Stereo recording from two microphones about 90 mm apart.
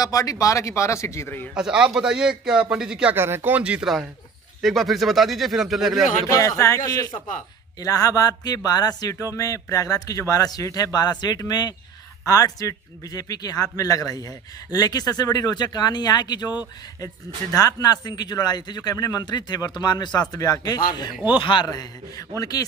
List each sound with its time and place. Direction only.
0.0 s a man's voice: 40° left (ahead or behind)
1.5 s a man's voice: 10° right (ahead or behind)
3.2 s speech: 25° right (ahead or behind)
4.6 s speech: centre (ahead or behind)
6.3 s a man's voice: 35° left (ahead or behind)
17.5 s speech: 40° left (ahead or behind)
19.2 s speech: 55° left (ahead or behind)
21.3 s speech: 70° left (ahead or behind)
21.6 s speech: 45° left (ahead or behind)